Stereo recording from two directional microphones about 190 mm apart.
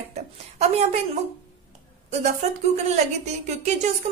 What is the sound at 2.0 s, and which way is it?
A woman's voice, 35° right (ahead or behind).